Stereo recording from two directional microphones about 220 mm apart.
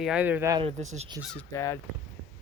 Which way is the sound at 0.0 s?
5° right (ahead or behind).